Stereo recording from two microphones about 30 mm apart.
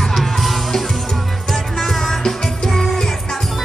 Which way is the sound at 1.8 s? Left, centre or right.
Centre.